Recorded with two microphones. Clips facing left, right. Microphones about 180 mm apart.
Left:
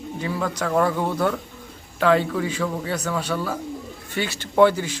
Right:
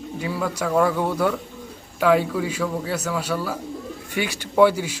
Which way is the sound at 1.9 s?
10° right (ahead or behind).